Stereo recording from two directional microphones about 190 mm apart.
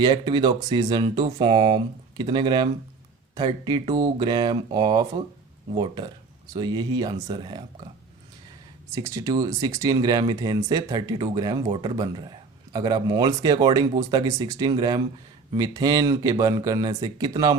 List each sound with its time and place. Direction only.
0.0 s speech: 25° right (ahead or behind)
8.9 s speech: 15° right (ahead or behind)